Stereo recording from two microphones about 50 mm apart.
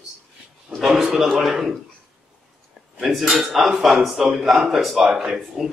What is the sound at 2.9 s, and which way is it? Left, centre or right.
Speech, centre.